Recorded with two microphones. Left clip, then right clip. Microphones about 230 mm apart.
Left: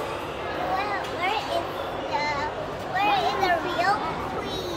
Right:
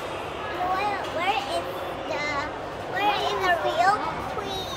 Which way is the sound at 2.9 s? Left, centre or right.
Right.